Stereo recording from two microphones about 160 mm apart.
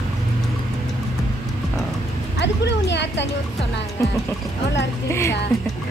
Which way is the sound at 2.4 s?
90° left.